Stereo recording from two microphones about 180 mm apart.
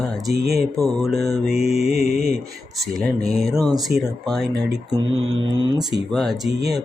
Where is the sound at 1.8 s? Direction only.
60° right (ahead or behind).